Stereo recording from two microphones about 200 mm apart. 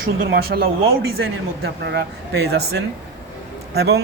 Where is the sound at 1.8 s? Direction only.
55° right (ahead or behind).